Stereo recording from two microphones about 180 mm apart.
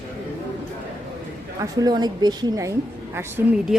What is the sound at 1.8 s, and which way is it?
A woman's voice, 20° right (ahead or behind).